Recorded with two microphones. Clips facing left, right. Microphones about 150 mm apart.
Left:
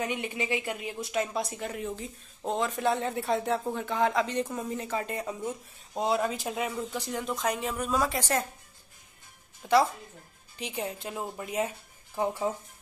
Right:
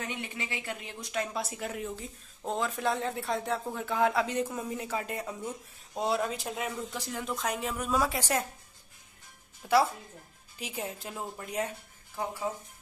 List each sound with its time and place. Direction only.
0.0 s speech: 15° left (ahead or behind)
1.0 s speech: centre (ahead or behind)
9.6 s speech: centre (ahead or behind)
12.2 s speech: 20° left (ahead or behind)